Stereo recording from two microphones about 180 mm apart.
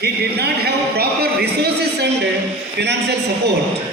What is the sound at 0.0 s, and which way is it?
Speech, 65° right (ahead or behind).